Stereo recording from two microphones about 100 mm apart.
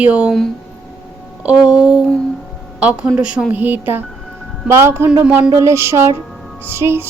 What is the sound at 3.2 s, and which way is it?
A woman's voice, 10° right (ahead or behind).